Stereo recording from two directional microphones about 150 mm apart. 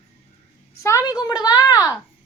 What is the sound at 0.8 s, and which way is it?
A woman's voice, 20° left (ahead or behind).